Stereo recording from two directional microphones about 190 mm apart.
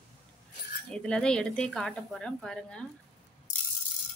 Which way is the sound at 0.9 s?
5° left (ahead or behind).